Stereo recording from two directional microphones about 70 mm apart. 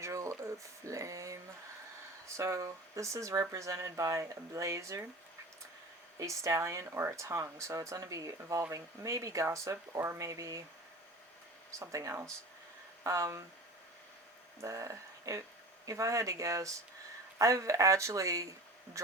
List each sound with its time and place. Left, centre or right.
0.0 s speech: right
6.1 s speech: right
11.7 s speech: right
14.6 s speech: right